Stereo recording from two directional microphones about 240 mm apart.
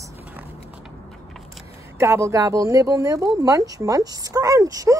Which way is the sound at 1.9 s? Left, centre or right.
Centre.